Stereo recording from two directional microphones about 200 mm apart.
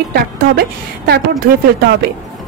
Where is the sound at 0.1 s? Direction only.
55° right (ahead or behind).